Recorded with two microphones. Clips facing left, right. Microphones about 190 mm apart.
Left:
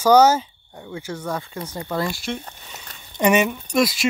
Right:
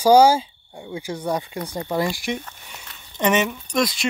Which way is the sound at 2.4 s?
35° left (ahead or behind).